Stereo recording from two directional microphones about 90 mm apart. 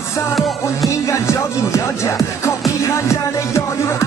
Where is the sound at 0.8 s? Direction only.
35° left (ahead or behind).